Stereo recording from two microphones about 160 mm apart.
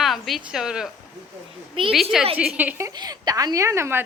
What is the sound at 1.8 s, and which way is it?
Speech, 30° right (ahead or behind).